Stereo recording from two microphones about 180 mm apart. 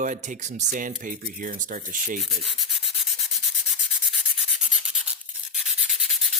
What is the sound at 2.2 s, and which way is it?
Sanding, centre (ahead or behind).